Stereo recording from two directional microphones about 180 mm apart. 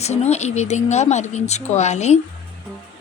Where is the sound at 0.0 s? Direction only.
35° left (ahead or behind).